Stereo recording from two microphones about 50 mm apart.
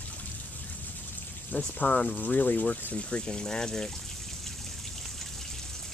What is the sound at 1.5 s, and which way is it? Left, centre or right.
Speech, left.